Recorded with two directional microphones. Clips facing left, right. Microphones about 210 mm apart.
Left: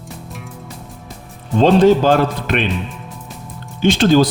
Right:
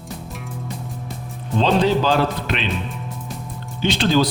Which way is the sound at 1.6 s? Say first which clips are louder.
Left 7 dB; 50° left (ahead or behind).